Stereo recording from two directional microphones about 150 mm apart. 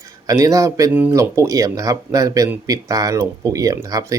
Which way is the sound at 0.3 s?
20° right (ahead or behind).